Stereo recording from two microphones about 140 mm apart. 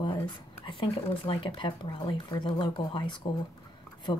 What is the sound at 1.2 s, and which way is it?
A woman's voice, 40° left (ahead or behind).